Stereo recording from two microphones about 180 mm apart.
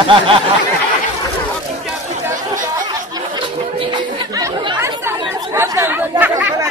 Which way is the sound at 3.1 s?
25° right (ahead or behind).